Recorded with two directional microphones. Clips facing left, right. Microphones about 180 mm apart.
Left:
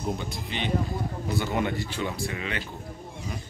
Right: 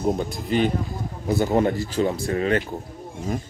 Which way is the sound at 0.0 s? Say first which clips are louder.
Right 8 dB; 45° right (ahead or behind).